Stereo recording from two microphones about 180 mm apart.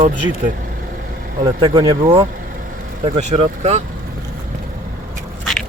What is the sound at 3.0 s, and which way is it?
Speech, 40° right (ahead or behind).